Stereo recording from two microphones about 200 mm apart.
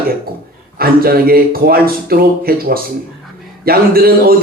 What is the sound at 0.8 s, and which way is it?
Speech, 50° right (ahead or behind).